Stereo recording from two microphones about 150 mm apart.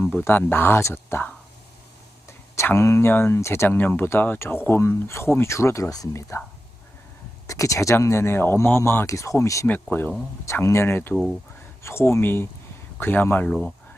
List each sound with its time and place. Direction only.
0.1 s speech: 10° left (ahead or behind)
2.6 s speech: 20° left (ahead or behind)
7.4 s speech: 20° left (ahead or behind)
11.1 s speech: centre (ahead or behind)
11.8 s speech: 15° left (ahead or behind)